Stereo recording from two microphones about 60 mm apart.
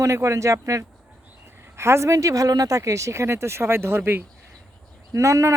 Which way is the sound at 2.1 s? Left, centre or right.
Right.